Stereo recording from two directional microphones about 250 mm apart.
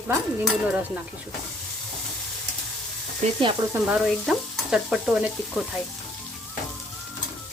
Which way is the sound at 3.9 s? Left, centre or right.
Centre.